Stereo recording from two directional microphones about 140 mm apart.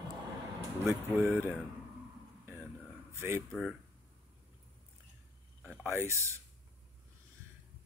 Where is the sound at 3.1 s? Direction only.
20° right (ahead or behind).